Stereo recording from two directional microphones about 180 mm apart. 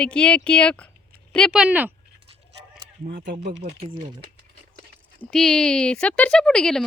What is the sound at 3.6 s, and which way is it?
Speech, 35° right (ahead or behind).